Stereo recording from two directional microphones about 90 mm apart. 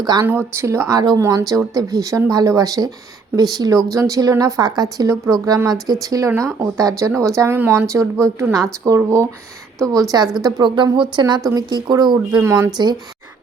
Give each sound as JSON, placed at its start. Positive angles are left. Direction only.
{"t": 0.2, "sound": "a woman's voice", "side_deg": -25}
{"t": 11.3, "sound": "speech", "side_deg": -45}
{"t": 12.4, "sound": "speech", "side_deg": -35}
{"t": 12.7, "sound": "speech", "side_deg": -55}